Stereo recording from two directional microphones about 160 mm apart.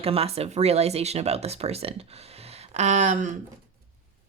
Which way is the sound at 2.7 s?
45° right (ahead or behind).